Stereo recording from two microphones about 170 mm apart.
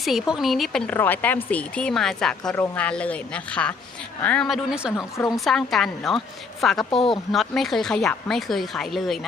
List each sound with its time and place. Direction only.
0.0 s a woman's voice: centre (ahead or behind)
4.9 s a woman's voice: 20° left (ahead or behind)
5.5 s speech: centre (ahead or behind)